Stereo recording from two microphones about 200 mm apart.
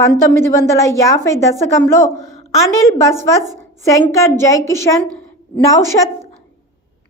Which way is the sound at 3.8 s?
15° left (ahead or behind).